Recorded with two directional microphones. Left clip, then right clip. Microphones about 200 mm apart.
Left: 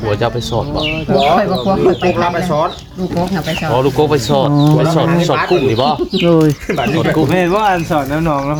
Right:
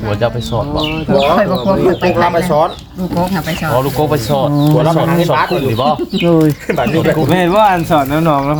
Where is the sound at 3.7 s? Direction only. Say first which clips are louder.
Left 1 dB; 35° left (ahead or behind).